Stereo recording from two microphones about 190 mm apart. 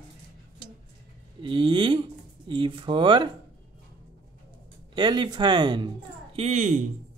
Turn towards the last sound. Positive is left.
turn(degrees=-40)  # may be behind; listen again after turning